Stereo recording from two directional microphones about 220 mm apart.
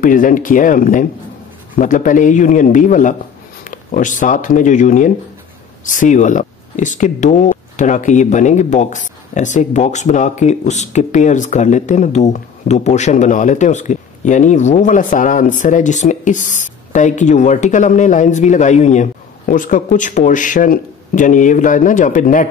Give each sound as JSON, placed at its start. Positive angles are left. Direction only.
{"t": 0.0, "sound": "speech", "side_deg": 40}